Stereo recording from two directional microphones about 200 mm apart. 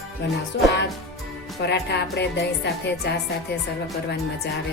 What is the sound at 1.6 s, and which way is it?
Speech, 55° left (ahead or behind).